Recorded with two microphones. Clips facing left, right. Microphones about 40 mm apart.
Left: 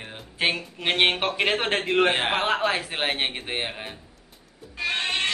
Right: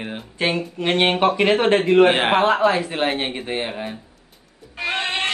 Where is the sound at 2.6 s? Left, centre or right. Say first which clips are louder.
Right 6 dB; centre.